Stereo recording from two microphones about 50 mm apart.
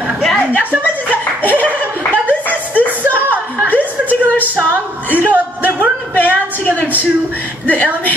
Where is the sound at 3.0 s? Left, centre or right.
Right.